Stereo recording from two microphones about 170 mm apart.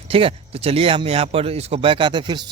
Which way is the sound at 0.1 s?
35° right (ahead or behind).